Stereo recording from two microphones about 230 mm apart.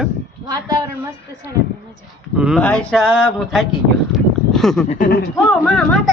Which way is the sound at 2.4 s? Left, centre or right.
Centre.